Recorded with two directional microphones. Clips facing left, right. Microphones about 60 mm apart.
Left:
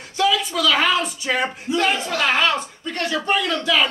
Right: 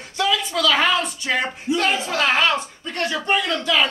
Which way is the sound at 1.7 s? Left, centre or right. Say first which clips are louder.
Right 1 dB; centre.